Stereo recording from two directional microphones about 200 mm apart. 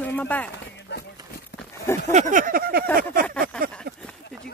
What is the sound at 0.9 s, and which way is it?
Run, 60° left (ahead or behind).